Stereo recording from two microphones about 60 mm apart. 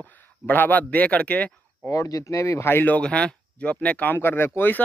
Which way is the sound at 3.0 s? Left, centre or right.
Centre.